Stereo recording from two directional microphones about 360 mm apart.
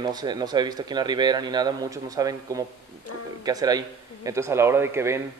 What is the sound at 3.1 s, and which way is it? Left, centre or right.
Speech, left.